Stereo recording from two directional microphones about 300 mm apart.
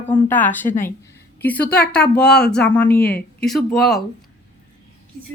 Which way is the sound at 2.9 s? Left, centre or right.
Left.